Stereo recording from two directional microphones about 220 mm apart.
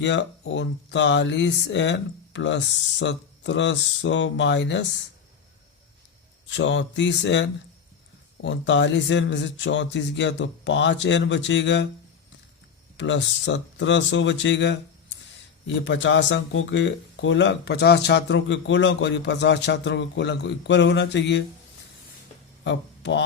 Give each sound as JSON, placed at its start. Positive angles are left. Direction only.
{"t": 0.0, "sound": "speech", "side_deg": 55}
{"t": 6.5, "sound": "speech", "side_deg": 55}
{"t": 13.0, "sound": "a man's voice", "side_deg": 55}
{"t": 22.6, "sound": "speech", "side_deg": 55}